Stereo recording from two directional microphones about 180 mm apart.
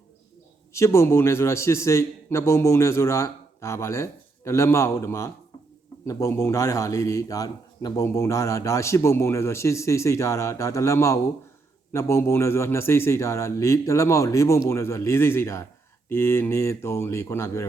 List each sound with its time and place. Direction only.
0.7 s a man's voice: 15° left (ahead or behind)